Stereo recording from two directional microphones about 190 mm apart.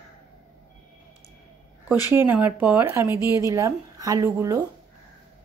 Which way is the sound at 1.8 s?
10° right (ahead or behind).